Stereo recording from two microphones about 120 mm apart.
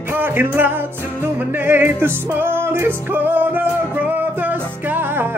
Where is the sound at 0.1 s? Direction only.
15° right (ahead or behind).